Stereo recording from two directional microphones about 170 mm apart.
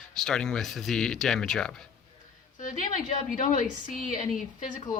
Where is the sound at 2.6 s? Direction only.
50° left (ahead or behind).